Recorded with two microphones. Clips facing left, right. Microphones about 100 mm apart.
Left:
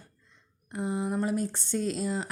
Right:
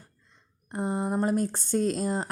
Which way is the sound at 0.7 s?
45° right (ahead or behind).